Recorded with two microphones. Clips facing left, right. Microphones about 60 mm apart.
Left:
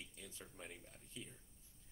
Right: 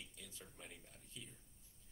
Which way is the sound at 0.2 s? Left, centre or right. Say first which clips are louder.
Left 3 dB; left.